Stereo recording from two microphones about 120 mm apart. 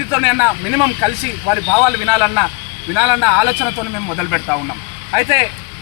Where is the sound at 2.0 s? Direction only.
5° right (ahead or behind).